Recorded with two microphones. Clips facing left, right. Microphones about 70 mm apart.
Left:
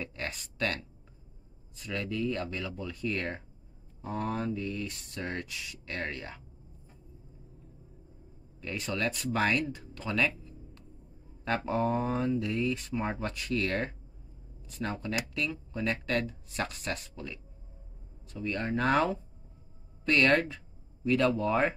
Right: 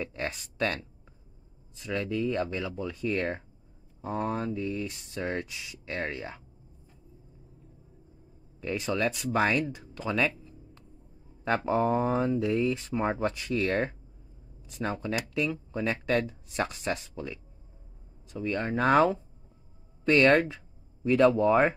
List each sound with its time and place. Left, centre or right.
0.0 s speech: centre
1.8 s speech: centre
8.5 s speech: centre
11.4 s speech: centre
20.1 s speech: centre